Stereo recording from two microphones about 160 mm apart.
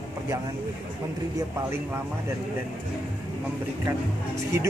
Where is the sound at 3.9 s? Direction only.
20° right (ahead or behind).